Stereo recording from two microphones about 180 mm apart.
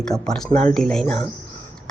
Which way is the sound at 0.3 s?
5° left (ahead or behind).